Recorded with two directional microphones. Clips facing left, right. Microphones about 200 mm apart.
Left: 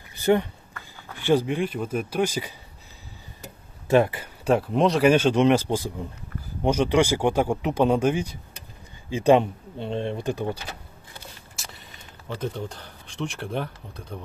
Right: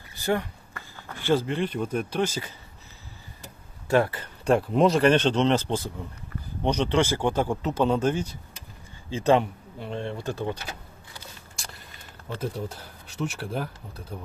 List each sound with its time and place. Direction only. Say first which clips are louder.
0.1 s a sound: left 6 dB; 20° left (ahead or behind)
1.0 s speech: left 3 dB; 15° left (ahead or behind)
3.8 s speech: left 3 dB; 20° left (ahead or behind)
11.5 s vehicle: even; centre (ahead or behind)
12.4 s speech: left 1 dB; 5° right (ahead or behind)